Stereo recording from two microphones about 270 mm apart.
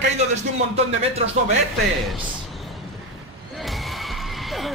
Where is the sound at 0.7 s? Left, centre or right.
Right.